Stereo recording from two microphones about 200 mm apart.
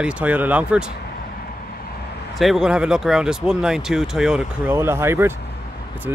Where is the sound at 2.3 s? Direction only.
Centre (ahead or behind).